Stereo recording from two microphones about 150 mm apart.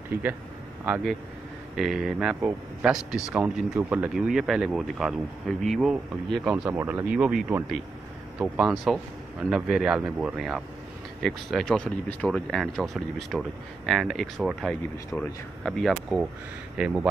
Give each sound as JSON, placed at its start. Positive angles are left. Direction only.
{"t": 0.1, "sound": "speech", "side_deg": -10}
{"t": 6.5, "sound": "speech", "side_deg": -10}